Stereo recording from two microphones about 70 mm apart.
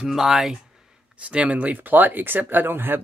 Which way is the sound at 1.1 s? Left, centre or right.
Centre.